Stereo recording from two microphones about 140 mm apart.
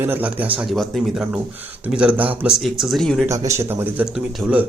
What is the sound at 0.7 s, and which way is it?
Speech, centre (ahead or behind).